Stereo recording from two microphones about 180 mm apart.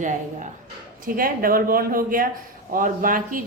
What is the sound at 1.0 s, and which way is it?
A woman's voice, 50° right (ahead or behind).